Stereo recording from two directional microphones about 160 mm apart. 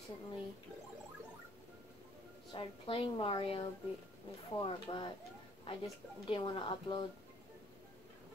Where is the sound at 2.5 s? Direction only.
30° left (ahead or behind).